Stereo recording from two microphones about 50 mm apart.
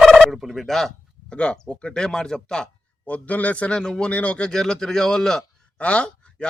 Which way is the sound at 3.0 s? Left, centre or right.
Left.